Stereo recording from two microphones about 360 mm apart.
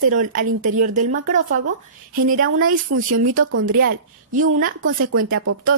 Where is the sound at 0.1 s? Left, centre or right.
Right.